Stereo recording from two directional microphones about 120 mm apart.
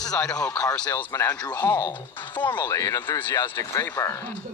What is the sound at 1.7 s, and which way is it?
Speech, 35° left (ahead or behind).